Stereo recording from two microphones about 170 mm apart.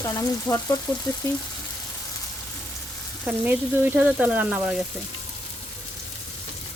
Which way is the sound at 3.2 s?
10° right (ahead or behind).